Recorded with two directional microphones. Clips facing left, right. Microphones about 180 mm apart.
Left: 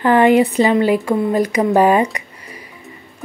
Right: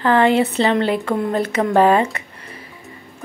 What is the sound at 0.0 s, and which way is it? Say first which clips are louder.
A woman's voice: left 3 dB; 15° left (ahead or behind).